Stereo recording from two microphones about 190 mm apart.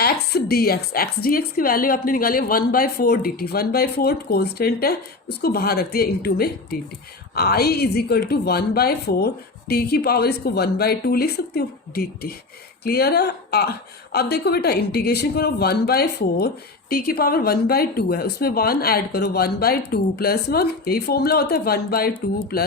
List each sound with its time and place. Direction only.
0.0 s a woman's voice: 55° left (ahead or behind)